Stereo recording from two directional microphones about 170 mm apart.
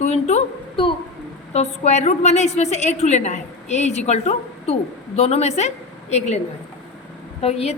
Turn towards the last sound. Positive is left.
turn(degrees=35)  # may be behind; listen again after turning